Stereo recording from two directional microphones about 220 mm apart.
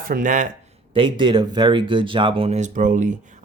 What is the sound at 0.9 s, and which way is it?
Speech, 20° right (ahead or behind).